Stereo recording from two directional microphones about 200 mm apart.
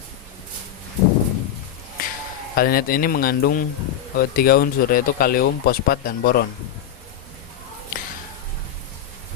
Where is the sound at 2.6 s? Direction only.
50° left (ahead or behind).